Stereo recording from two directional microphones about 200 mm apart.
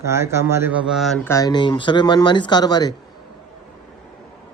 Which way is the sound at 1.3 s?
20° left (ahead or behind).